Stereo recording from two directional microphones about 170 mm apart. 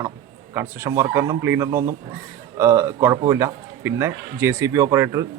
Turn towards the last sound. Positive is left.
turn(degrees=-20)  # may be behind; listen again after turning